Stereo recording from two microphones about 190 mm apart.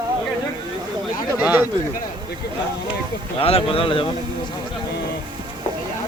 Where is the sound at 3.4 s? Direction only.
30° left (ahead or behind).